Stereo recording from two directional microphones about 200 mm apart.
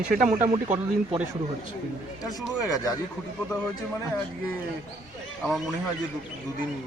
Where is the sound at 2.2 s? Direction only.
Centre (ahead or behind).